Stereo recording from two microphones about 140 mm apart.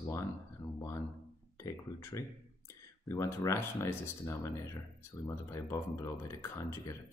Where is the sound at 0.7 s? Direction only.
20° left (ahead or behind).